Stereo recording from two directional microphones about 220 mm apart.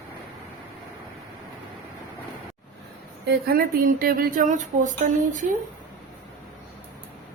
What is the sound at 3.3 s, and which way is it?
Speech, 40° right (ahead or behind).